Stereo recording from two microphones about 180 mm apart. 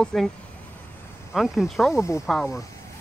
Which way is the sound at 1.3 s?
Centre (ahead or behind).